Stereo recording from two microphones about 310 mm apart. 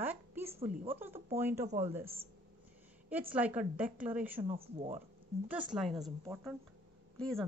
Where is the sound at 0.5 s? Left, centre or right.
Centre.